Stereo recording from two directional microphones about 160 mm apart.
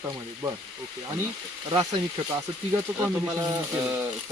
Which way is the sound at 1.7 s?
30° right (ahead or behind).